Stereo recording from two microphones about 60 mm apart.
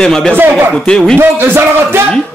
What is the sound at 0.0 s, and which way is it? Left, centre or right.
Speech, centre.